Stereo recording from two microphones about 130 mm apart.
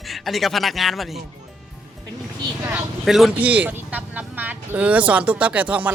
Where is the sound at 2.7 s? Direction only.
Centre (ahead or behind).